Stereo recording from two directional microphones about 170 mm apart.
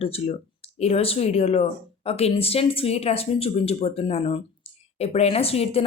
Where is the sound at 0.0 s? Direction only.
35° left (ahead or behind).